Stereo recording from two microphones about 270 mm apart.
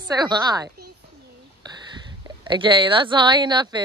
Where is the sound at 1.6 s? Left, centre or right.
Centre.